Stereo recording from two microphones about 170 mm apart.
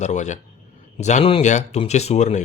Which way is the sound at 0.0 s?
45° left (ahead or behind).